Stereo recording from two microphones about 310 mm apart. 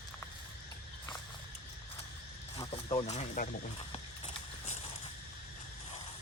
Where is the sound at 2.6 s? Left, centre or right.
Centre.